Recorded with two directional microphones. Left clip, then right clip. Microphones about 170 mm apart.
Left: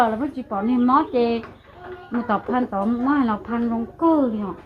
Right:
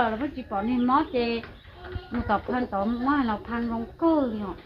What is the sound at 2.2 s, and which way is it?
A woman's voice, 60° left (ahead or behind).